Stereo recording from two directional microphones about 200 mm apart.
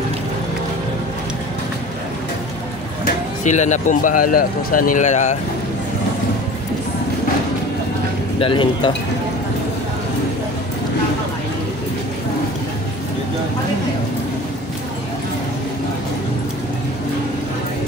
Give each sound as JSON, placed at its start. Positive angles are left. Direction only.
{"t": 3.4, "sound": "speech", "side_deg": 35}
{"t": 8.4, "sound": "speech", "side_deg": 25}